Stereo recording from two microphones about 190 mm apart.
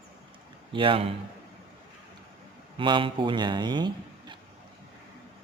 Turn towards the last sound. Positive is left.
turn(degrees=-25)  # may be behind; listen again after turning